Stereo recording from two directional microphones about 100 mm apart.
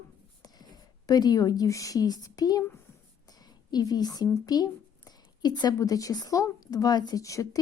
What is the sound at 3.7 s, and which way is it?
A woman's voice, 40° left (ahead or behind).